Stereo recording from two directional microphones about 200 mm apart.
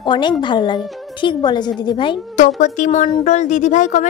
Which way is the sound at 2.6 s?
35° left (ahead or behind).